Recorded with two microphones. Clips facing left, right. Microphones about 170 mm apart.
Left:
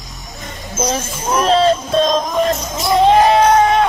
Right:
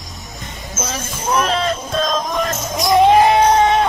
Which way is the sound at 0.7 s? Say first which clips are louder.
Left 7 dB; 30° left (ahead or behind).